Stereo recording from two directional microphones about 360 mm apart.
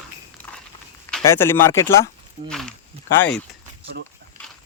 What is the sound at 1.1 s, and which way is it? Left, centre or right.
Speech, centre.